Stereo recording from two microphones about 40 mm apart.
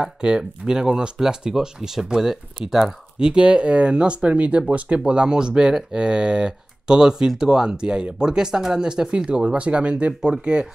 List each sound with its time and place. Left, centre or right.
0.2 s speech: centre
3.2 s speech: right